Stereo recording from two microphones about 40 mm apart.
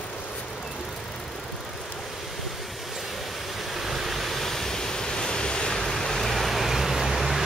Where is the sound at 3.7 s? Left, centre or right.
Centre; by 5.8 s left.